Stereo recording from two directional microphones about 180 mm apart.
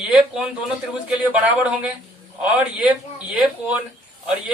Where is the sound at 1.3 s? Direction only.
5° right (ahead or behind).